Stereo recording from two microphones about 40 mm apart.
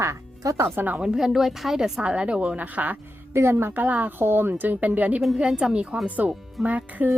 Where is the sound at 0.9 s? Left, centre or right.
Centre.